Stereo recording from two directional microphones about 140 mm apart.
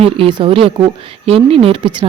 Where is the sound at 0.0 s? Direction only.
40° right (ahead or behind).